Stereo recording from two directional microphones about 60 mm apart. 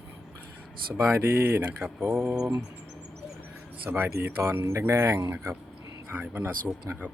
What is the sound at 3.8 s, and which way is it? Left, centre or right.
Speech, right.